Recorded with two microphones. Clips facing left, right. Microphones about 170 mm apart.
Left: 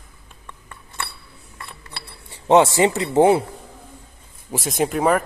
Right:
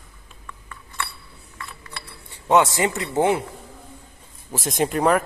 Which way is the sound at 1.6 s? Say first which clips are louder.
Even; 30° left (ahead or behind).